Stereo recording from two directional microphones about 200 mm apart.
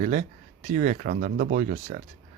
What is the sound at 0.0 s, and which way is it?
Speech, 35° right (ahead or behind).